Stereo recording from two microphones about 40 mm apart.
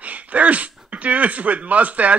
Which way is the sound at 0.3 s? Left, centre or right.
Right.